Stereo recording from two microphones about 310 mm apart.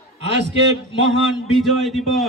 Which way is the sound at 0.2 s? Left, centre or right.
Right.